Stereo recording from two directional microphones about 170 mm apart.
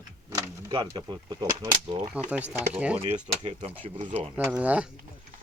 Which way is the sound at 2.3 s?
5° right (ahead or behind).